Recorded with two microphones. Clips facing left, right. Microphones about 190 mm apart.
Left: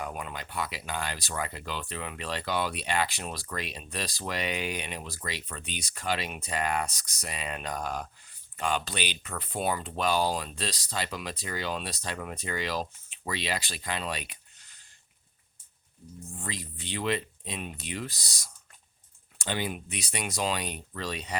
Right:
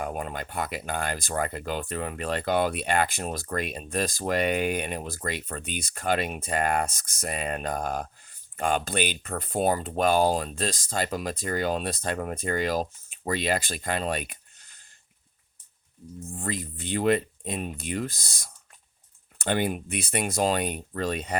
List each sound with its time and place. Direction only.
0.0 s speech: 45° right (ahead or behind)
16.4 s speech: 50° right (ahead or behind)